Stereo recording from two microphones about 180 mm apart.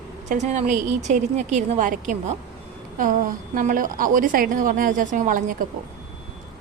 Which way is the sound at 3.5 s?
50° right (ahead or behind).